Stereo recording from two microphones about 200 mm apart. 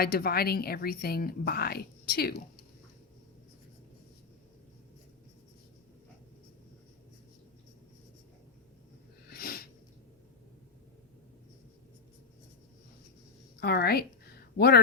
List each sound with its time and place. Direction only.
0.0 s a woman's voice: 50° left (ahead or behind)
9.3 s a sound: 50° left (ahead or behind)
13.6 s a woman's voice: 50° left (ahead or behind)